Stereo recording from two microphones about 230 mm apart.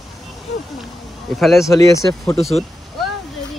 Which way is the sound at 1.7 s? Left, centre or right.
Centre.